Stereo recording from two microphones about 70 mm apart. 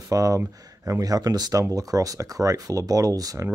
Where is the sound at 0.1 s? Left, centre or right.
Right.